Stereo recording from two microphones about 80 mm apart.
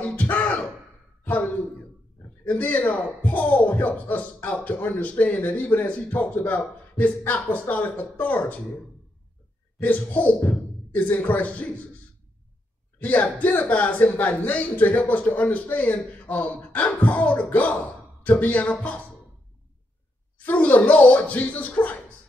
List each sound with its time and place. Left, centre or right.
0.0 s a sound: centre
1.2 s speech: left
9.8 s speech: left
13.0 s speech: left
20.3 s speech: centre